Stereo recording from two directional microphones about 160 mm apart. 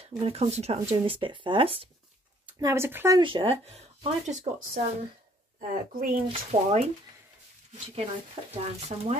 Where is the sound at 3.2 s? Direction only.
30° right (ahead or behind).